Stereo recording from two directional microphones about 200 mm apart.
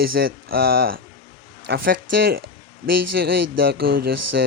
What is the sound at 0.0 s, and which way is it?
Speech, 50° right (ahead or behind).